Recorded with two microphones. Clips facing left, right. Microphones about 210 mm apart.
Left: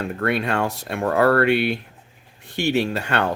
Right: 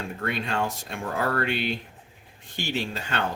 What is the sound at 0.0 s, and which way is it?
Speech, 65° left (ahead or behind).